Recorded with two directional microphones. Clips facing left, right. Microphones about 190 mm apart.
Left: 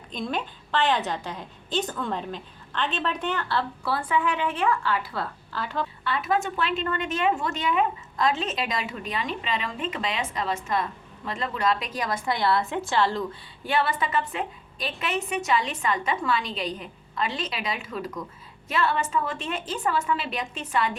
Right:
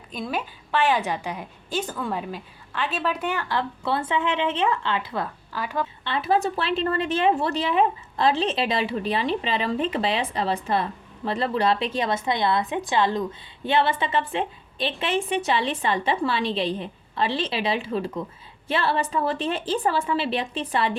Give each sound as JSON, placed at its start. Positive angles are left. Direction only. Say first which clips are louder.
{"t": 0.1, "sound": "a woman's voice", "louder": "right 1 dB", "side_deg": -5}
{"t": 6.1, "sound": "a woman's voice", "louder": "right 3 dB", "side_deg": -30}